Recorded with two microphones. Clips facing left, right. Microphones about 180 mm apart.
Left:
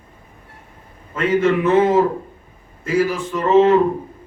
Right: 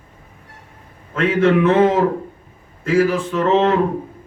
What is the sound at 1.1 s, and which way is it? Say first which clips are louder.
A man's voice: right 2 dB; 70° right (ahead or behind).